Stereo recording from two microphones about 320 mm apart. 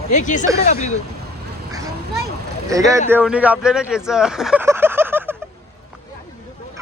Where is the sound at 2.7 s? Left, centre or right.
Centre.